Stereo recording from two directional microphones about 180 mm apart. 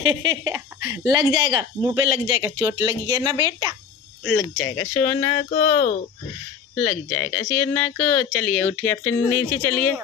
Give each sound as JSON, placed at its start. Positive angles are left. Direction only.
{"t": 0.1, "sound": "speech", "side_deg": -20}
{"t": 4.2, "sound": "speech", "side_deg": 0}
{"t": 4.6, "sound": "speech", "side_deg": 15}
{"t": 6.7, "sound": "speech", "side_deg": 10}